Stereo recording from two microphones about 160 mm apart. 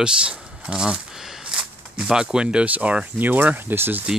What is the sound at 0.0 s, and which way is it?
Speech, 5° right (ahead or behind).